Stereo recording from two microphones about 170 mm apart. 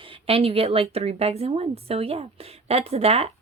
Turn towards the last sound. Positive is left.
turn(degrees=-35)  # may be behind; listen again after turning